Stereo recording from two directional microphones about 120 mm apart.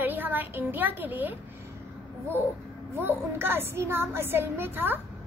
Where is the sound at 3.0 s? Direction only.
20° right (ahead or behind).